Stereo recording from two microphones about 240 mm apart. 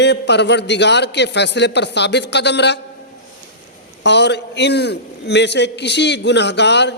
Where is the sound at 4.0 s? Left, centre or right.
Left.